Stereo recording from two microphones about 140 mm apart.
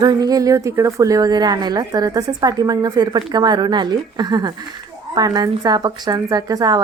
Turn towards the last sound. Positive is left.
turn(degrees=-25)  # may be behind; listen again after turning